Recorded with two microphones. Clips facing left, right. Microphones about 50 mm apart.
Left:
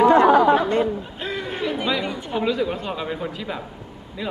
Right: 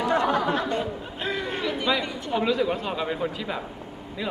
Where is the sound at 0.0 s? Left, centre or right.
Left.